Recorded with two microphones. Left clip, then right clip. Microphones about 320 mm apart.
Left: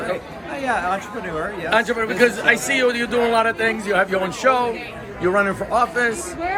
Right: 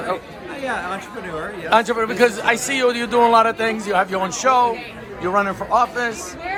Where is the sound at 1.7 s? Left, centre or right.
Centre.